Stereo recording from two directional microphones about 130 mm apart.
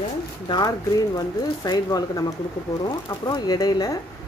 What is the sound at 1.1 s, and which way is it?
Speech, 30° left (ahead or behind).